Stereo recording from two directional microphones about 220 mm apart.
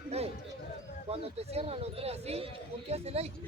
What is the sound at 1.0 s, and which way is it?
Speech, 25° right (ahead or behind).